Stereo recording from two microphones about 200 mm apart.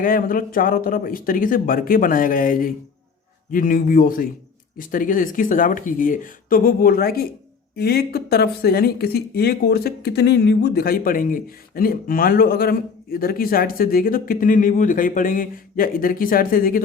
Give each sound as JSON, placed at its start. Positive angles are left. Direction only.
{"t": 0.0, "sound": "speech", "side_deg": 45}